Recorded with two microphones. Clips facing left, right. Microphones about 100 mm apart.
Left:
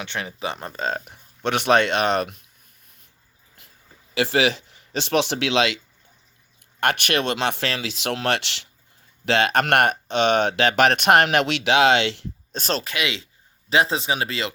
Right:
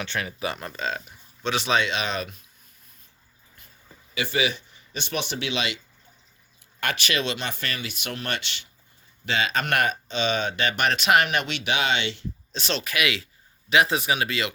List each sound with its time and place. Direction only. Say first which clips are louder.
0.0 s speech: even; 20° left (ahead or behind); by 1.1 s 45° left (ahead or behind)
1.1 s speech: left 3 dB; 55° left (ahead or behind)
3.6 s a sound: left 1 dB; 90° left
4.1 s speech: left 6 dB; 85° left
6.7 s speech: left 5 dB; 60° left (ahead or behind); by 12.3 s 85° left
12.5 s speech: left 4 dB; 45° left (ahead or behind)
12.8 s speech: right 1 dB; 25° left (ahead or behind)